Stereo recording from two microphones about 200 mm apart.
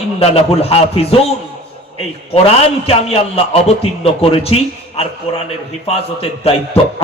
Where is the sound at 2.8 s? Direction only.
30° left (ahead or behind).